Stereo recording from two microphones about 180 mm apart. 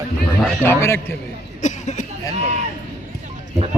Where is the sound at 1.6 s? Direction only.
40° left (ahead or behind).